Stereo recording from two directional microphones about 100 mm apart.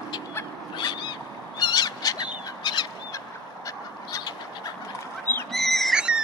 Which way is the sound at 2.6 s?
45° left (ahead or behind).